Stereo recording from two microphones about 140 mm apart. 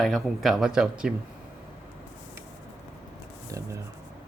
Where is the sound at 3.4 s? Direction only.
25° right (ahead or behind).